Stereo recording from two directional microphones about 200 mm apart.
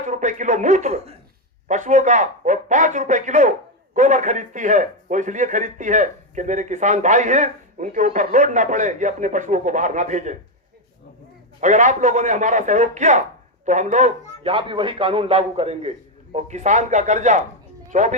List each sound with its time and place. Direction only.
0.1 s a man's voice: 40° right (ahead or behind)
11.6 s a man's voice: 35° right (ahead or behind)